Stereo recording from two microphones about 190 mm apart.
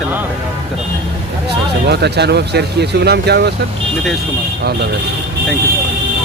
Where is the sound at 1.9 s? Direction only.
60° right (ahead or behind).